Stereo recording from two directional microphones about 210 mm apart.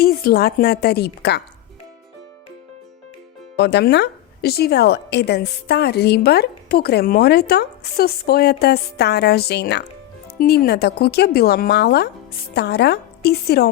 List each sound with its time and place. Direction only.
0.0 s a woman's voice: 45° left (ahead or behind)
3.6 s a woman's voice: 50° left (ahead or behind)